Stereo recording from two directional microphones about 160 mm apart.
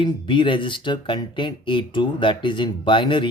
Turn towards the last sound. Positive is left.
turn(degrees=30)  # may be behind; listen again after turning